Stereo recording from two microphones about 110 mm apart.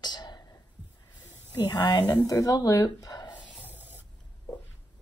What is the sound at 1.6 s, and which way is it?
Speech, 35° left (ahead or behind).